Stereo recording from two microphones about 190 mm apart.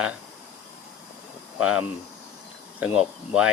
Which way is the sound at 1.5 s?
5° right (ahead or behind).